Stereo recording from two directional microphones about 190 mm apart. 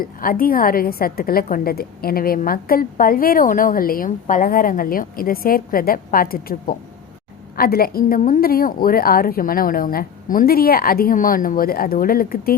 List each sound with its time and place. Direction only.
0.0 s a woman's voice: 50° left (ahead or behind)